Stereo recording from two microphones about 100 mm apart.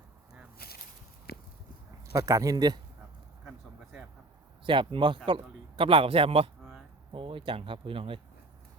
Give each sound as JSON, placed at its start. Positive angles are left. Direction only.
{"t": 2.1, "sound": "speech", "side_deg": -35}
{"t": 4.6, "sound": "a man's voice", "side_deg": -55}